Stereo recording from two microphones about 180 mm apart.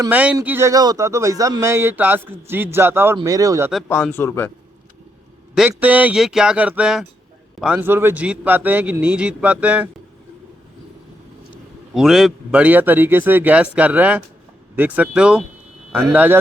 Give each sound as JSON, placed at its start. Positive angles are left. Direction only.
{"t": 0.1, "sound": "speech", "side_deg": -10}
{"t": 3.8, "sound": "speech", "side_deg": 10}
{"t": 5.5, "sound": "speech", "side_deg": -10}
{"t": 11.9, "sound": "speech", "side_deg": 0}